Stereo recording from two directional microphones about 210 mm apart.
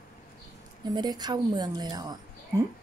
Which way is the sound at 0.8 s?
20° right (ahead or behind).